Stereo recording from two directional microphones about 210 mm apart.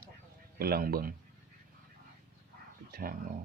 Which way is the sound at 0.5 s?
45° right (ahead or behind).